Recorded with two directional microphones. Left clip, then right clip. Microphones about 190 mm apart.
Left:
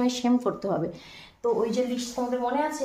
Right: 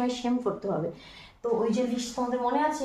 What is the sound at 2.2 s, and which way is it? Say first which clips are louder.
Speech: left 1 dB; 40° left (ahead or behind).